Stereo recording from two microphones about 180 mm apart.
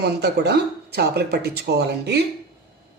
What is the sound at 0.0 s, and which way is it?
Speech, 65° right (ahead or behind).